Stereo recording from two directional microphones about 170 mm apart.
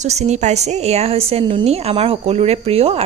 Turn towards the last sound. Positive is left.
turn(degrees=-35)  # may be behind; listen again after turning